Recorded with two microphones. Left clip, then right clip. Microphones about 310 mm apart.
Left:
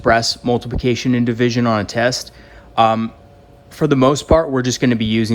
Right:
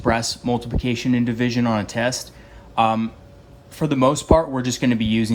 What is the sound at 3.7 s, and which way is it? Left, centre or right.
Speech, left.